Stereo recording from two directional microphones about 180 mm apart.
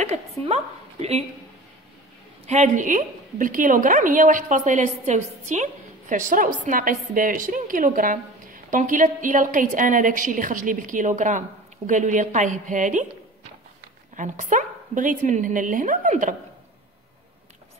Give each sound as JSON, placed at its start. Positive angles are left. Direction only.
{"t": 0.0, "sound": "a woman's voice", "side_deg": -35}
{"t": 2.4, "sound": "a woman's voice", "side_deg": -40}
{"t": 14.1, "sound": "a woman's voice", "side_deg": -45}